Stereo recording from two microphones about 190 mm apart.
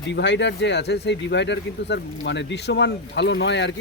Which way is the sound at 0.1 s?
70° left (ahead or behind).